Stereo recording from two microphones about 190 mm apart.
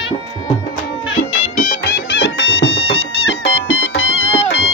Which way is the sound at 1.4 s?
40° left (ahead or behind).